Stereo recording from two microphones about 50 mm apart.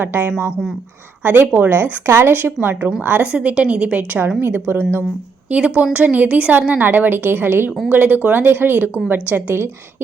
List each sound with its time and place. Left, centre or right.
0.0 s a woman's voice: right
3.3 s a woman's voice: right
4.4 s a woman's voice: right
5.5 s a woman's voice: right